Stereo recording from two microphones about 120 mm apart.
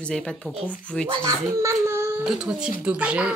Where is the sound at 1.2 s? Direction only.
25° right (ahead or behind).